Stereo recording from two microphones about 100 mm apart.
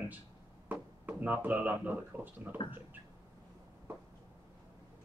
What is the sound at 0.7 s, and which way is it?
Speech, 15° right (ahead or behind).